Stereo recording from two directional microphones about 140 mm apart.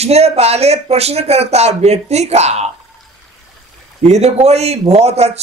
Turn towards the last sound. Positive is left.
turn(degrees=-50)  # may be behind; listen again after turning